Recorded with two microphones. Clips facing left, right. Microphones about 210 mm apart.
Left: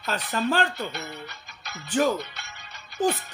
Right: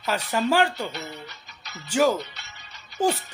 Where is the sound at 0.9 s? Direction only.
50° left (ahead or behind).